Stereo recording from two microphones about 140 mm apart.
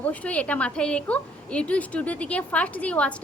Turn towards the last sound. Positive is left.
turn(degrees=10)  # may be behind; listen again after turning